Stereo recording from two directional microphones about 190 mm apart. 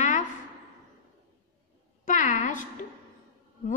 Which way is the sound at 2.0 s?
40° left (ahead or behind).